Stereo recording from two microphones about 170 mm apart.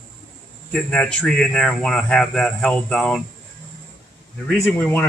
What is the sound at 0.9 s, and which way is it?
Speech, 5° left (ahead or behind).